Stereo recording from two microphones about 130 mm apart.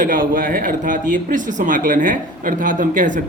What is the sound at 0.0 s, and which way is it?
Speech, 90° right.